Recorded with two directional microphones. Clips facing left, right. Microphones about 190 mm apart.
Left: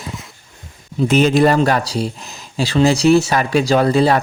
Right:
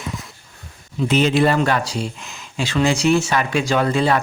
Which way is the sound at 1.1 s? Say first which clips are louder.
Left 3 dB; 45° left (ahead or behind).